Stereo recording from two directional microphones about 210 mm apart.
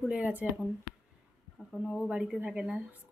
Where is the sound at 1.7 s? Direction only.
Centre (ahead or behind).